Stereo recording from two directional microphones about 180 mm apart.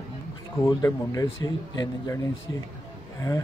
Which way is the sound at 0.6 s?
20° left (ahead or behind).